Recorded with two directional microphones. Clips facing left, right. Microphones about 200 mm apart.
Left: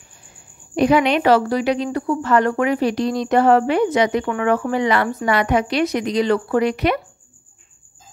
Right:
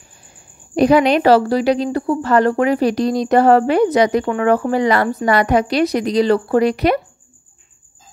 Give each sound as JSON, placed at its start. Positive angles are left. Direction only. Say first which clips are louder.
{"t": 0.7, "sound": "a woman's voice", "louder": "right 3 dB", "side_deg": -40}